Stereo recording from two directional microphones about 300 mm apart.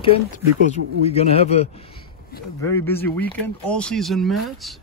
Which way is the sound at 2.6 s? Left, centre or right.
Centre.